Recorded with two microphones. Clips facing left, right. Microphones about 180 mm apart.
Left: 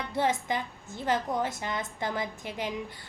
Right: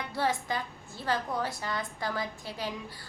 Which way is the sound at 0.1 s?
20° left (ahead or behind).